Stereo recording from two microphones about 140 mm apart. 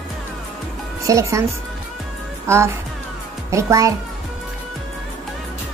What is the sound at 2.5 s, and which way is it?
A child's voice, 20° right (ahead or behind).